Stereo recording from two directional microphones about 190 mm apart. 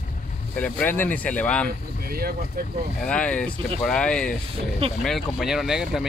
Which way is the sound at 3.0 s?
5° left (ahead or behind).